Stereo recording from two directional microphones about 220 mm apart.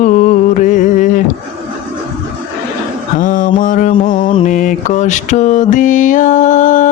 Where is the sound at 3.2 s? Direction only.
40° left (ahead or behind).